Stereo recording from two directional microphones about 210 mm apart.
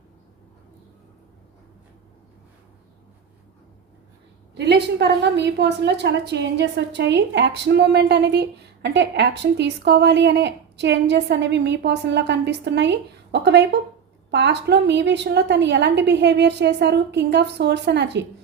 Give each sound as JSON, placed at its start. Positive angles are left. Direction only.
{"t": 4.5, "sound": "a woman's voice", "side_deg": -55}